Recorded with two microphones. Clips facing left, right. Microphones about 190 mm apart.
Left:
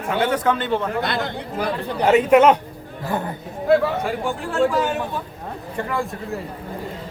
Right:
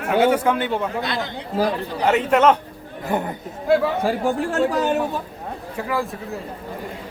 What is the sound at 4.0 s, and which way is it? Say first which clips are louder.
Speech: right 4 dB; 35° right (ahead or behind).